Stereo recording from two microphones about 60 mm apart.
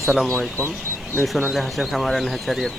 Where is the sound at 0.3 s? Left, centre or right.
Left.